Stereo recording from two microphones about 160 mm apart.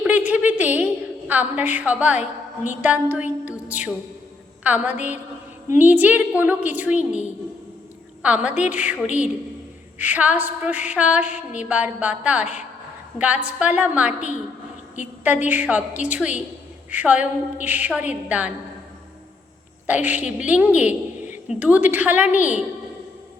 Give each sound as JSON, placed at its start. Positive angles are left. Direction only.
{"t": 0.0, "sound": "a sound", "side_deg": -10}
{"t": 1.3, "sound": "a woman's voice", "side_deg": -10}
{"t": 4.6, "sound": "a woman's voice", "side_deg": -10}
{"t": 10.0, "sound": "a woman's voice", "side_deg": -10}
{"t": 15.2, "sound": "a woman's voice", "side_deg": -10}
{"t": 19.9, "sound": "a woman's voice", "side_deg": -10}